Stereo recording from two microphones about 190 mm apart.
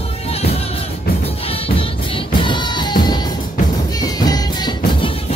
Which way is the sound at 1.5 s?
30° left (ahead or behind).